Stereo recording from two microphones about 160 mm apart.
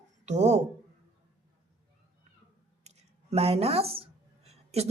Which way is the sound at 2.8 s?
40° right (ahead or behind).